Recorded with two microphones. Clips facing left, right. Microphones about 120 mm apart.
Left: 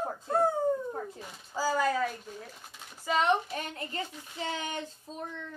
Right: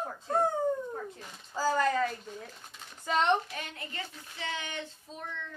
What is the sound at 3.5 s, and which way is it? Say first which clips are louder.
Speech: left 4 dB; 35° left (ahead or behind).